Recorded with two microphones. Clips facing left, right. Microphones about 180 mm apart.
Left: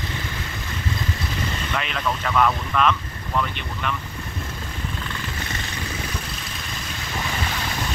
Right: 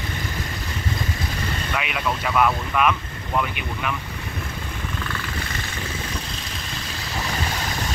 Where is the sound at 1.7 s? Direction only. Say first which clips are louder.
Right 1 dB; 10° right (ahead or behind).